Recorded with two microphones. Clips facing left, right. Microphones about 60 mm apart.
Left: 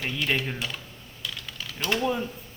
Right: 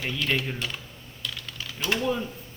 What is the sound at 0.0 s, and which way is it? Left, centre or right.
Speech, centre.